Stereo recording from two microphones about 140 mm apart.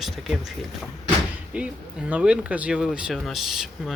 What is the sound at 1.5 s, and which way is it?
Speech, 10° right (ahead or behind).